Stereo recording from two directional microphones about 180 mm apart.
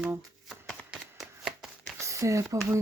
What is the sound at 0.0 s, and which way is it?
Speech, 10° right (ahead or behind).